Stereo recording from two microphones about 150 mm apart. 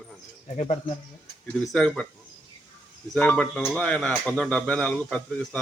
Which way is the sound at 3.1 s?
10° left (ahead or behind).